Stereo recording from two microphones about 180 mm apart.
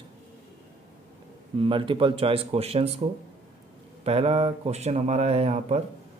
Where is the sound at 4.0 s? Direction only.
35° right (ahead or behind).